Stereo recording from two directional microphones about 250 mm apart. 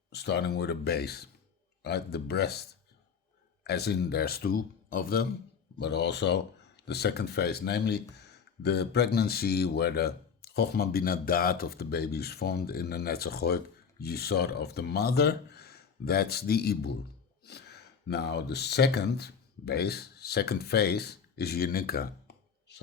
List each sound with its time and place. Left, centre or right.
0.1 s speech: left